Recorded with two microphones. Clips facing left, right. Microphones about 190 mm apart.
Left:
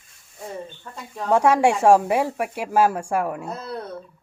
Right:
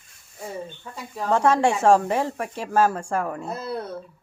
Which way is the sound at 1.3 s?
10° left (ahead or behind).